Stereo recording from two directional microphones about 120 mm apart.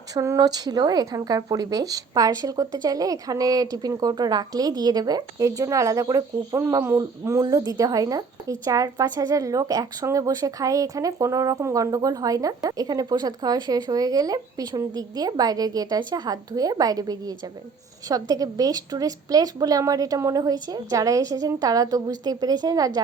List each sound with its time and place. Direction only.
0.1 s a woman's voice: 30° right (ahead or behind)